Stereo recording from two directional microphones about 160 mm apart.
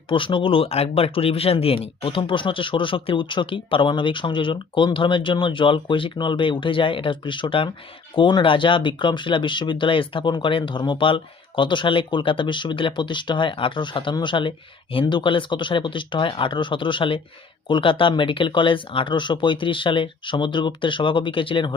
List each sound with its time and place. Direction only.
0.1 s speech: 30° left (ahead or behind)